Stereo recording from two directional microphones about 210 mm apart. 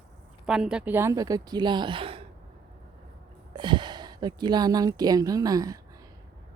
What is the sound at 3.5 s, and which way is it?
A woman's voice, 20° right (ahead or behind).